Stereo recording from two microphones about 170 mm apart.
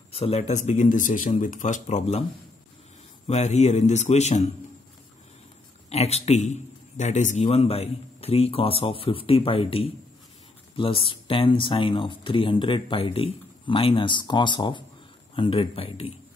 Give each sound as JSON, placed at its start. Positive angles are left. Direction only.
{"t": 0.1, "sound": "speech", "side_deg": 35}
{"t": 3.3, "sound": "a man's voice", "side_deg": 40}
{"t": 5.9, "sound": "a man's voice", "side_deg": 40}